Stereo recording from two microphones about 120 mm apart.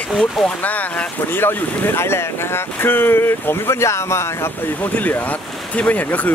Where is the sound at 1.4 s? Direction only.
20° left (ahead or behind).